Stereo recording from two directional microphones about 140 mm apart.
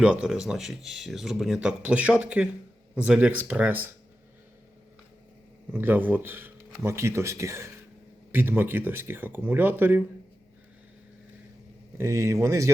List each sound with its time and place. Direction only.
0.0 s speech: 5° right (ahead or behind)
5.7 s speech: 15° right (ahead or behind)
11.9 s speech: 20° right (ahead or behind)